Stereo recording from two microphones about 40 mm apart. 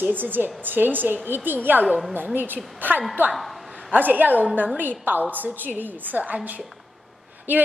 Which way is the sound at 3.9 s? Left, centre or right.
Right.